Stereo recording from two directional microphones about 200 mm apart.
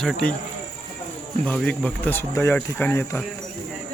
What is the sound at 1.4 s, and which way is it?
Speech, 5° left (ahead or behind).